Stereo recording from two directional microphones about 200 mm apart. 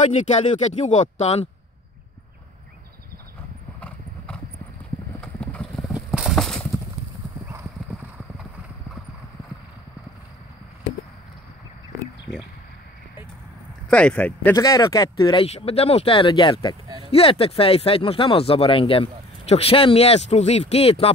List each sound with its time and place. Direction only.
0.3 s speech: 35° left (ahead or behind)
5.2 s horse: 5° left (ahead or behind)
13.8 s speech: 5° left (ahead or behind); by 21.1 s 30° left (ahead or behind)